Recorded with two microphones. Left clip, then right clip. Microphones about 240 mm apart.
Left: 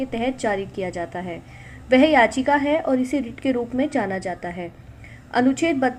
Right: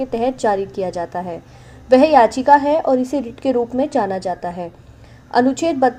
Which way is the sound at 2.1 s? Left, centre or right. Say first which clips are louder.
Right 6 dB; centre.